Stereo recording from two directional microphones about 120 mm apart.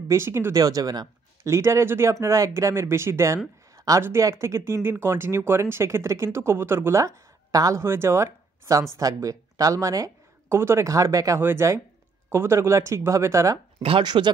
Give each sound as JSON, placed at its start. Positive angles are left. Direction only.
{"t": 0.1, "sound": "speech", "side_deg": -20}
{"t": 13.8, "sound": "speech", "side_deg": -45}